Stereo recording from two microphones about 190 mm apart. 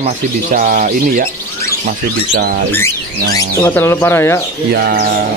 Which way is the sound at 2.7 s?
15° left (ahead or behind).